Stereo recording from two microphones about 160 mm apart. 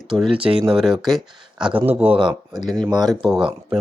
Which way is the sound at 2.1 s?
30° right (ahead or behind).